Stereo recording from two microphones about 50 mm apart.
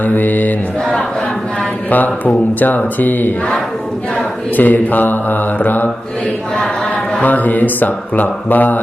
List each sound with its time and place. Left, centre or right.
0.0 s speech: left
1.9 s speech: left
4.5 s speech: left
7.2 s speech: left